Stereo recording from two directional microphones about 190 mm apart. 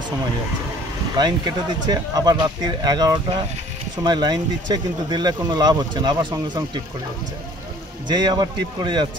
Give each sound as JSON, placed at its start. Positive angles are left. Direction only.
{"t": 1.1, "sound": "speech", "side_deg": -20}
{"t": 8.1, "sound": "speech", "side_deg": -20}